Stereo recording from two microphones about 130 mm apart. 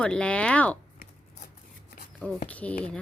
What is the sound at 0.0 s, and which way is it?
Speech, 10° left (ahead or behind).